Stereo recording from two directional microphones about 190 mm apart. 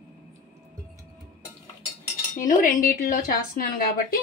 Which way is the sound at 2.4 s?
45° left (ahead or behind).